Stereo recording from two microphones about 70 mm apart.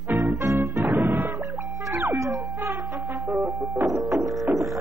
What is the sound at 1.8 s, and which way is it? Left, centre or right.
Music, right.